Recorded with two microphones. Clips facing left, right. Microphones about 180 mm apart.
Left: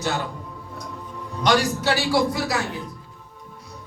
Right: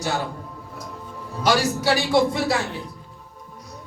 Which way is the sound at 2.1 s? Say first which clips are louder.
Right 2 dB; 25° right (ahead or behind).